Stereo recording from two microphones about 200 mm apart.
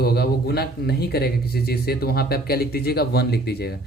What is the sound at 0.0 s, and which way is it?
A man's voice, 50° left (ahead or behind).